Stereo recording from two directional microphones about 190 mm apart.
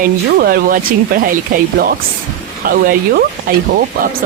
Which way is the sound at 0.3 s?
50° right (ahead or behind).